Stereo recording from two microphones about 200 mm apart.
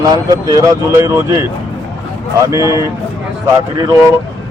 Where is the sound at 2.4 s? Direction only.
15° right (ahead or behind).